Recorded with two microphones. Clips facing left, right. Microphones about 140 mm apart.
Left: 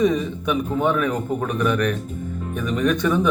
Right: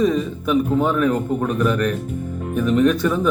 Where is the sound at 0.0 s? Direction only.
Centre (ahead or behind).